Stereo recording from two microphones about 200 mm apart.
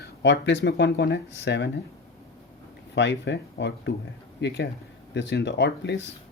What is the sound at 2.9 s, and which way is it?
Speech, 60° left (ahead or behind).